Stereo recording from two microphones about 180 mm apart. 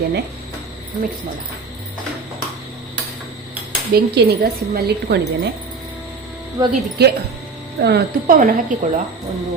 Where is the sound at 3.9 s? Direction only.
60° right (ahead or behind).